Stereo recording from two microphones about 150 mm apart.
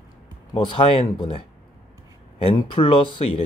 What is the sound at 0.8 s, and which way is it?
Speech, 40° left (ahead or behind).